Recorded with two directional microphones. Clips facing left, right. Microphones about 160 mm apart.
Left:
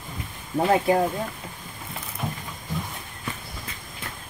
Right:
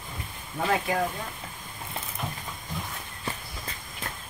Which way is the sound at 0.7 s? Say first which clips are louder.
Left 6 dB; 30° left (ahead or behind).